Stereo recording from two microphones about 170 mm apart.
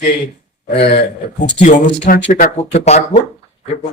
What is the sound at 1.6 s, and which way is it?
Speech, 45° left (ahead or behind).